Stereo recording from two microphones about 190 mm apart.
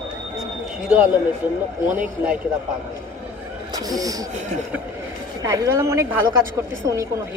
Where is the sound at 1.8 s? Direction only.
5° right (ahead or behind).